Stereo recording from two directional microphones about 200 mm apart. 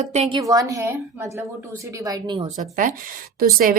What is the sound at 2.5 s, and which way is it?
Speech, 40° right (ahead or behind).